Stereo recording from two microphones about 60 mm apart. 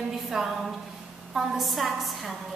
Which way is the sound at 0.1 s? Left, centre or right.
Centre.